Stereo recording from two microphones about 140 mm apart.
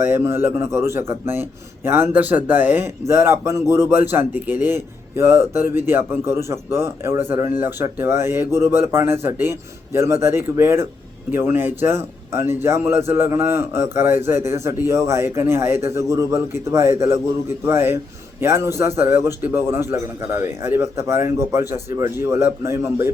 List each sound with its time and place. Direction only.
0.0 s a man's voice: 15° right (ahead or behind)